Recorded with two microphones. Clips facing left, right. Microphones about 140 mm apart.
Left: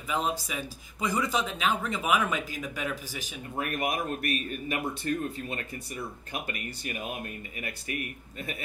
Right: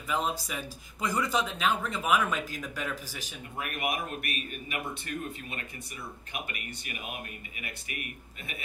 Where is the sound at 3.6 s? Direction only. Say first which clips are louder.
Left 3 dB; 40° left (ahead or behind).